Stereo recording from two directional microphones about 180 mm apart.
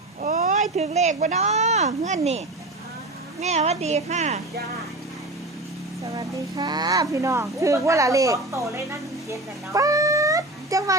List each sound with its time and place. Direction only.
0.2 s speech: 50° right (ahead or behind)
3.4 s a woman's voice: 40° right (ahead or behind)
6.1 s speech: 25° right (ahead or behind)